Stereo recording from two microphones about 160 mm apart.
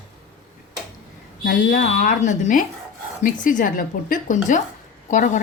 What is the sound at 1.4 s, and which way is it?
A woman's voice, 55° left (ahead or behind).